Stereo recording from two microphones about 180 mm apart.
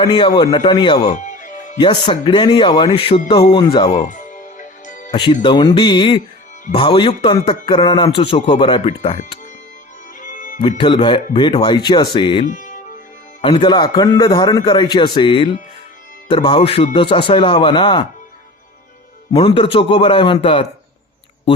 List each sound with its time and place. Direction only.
0.0 s speech: 25° left (ahead or behind)
1.0 s music: 40° left (ahead or behind)
2.0 s speech: 25° left (ahead or behind)
4.1 s music: 45° left (ahead or behind)
5.1 s a man's voice: 25° left (ahead or behind)
10.2 s music: 45° left (ahead or behind)
10.6 s speech: 25° left (ahead or behind)
12.5 s speech: 45° left (ahead or behind)
13.4 s speech: 25° left (ahead or behind)
19.3 s speech: 30° left (ahead or behind)